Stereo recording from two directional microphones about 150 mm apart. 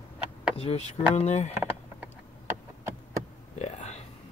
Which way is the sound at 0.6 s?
45° left (ahead or behind).